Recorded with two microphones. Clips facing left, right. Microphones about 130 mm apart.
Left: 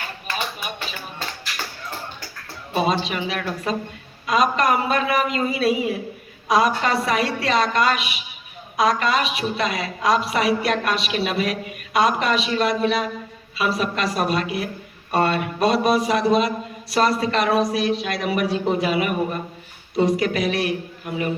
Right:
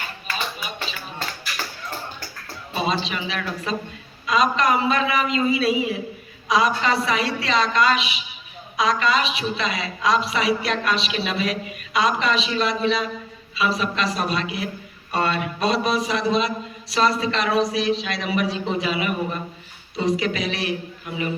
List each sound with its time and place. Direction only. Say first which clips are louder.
2.7 s a woman's voice: left 3 dB; 55° left (ahead or behind)